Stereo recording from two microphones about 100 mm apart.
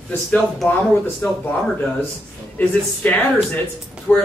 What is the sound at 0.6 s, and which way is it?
Speech, 5° left (ahead or behind).